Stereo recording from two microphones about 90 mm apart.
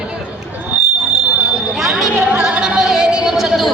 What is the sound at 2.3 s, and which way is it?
Music, 15° right (ahead or behind).